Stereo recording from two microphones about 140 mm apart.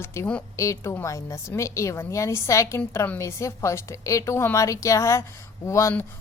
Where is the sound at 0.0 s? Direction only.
20° left (ahead or behind).